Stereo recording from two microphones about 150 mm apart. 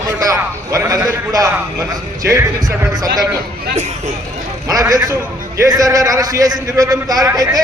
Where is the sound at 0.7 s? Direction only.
25° right (ahead or behind).